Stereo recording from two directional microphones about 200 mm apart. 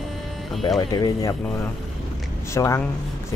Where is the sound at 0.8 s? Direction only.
20° left (ahead or behind).